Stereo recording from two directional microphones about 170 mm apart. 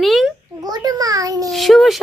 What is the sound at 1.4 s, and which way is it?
Speech, centre (ahead or behind).